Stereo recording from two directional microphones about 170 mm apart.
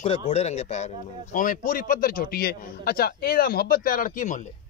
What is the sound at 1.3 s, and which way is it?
A man's voice, 50° left (ahead or behind).